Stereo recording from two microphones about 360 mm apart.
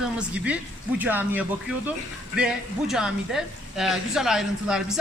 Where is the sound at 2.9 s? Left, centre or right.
Centre.